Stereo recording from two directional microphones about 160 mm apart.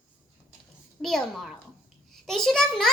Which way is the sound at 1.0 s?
Centre (ahead or behind).